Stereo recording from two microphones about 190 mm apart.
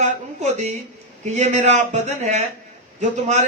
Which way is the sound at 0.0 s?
35° right (ahead or behind).